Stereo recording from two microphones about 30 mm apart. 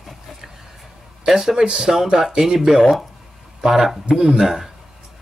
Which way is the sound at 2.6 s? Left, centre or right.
Centre.